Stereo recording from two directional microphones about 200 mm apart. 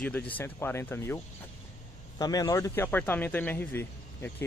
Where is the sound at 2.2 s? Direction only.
20° left (ahead or behind).